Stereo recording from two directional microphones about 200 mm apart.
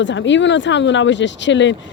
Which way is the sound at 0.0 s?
65° left (ahead or behind).